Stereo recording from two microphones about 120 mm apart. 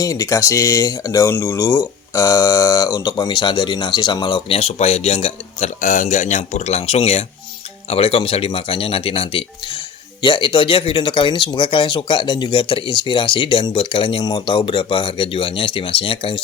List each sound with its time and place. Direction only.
0.0 s speech: 30° left (ahead or behind)
4.5 s speech: 60° left (ahead or behind)